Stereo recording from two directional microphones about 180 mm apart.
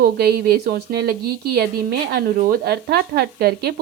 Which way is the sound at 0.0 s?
60° right (ahead or behind).